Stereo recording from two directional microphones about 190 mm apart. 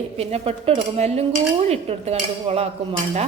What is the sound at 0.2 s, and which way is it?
Speech, 30° right (ahead or behind).